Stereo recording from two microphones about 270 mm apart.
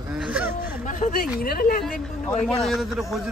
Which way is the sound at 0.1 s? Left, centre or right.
Centre.